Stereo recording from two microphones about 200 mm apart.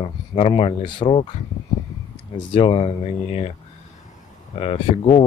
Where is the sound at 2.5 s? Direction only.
25° left (ahead or behind).